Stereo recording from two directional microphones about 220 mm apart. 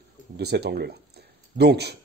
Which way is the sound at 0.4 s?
50° right (ahead or behind).